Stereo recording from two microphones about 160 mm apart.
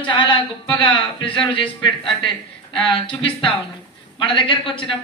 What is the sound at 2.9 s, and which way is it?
A man's voice, 35° left (ahead or behind).